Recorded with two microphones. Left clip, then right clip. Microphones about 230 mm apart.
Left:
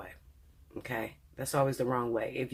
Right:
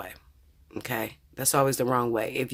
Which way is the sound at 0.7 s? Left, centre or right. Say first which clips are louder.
Right 5 dB; right.